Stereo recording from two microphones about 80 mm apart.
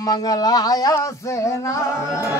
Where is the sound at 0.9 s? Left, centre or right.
Left.